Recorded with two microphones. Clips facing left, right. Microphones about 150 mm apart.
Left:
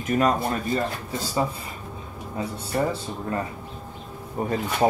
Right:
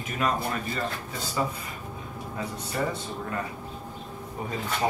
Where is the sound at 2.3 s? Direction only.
30° left (ahead or behind).